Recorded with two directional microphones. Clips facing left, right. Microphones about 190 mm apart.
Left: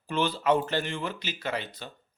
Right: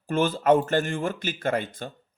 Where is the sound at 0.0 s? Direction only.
50° right (ahead or behind).